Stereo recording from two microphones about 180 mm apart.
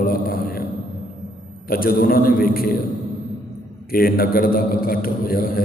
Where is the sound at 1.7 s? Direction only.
55° left (ahead or behind).